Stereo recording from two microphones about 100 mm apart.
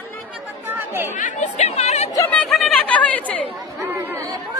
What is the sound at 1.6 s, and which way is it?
Chatter, 90° left.